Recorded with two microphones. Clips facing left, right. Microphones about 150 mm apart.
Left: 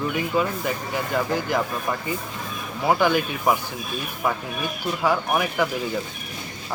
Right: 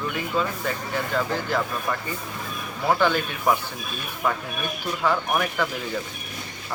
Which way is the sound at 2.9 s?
10° left (ahead or behind).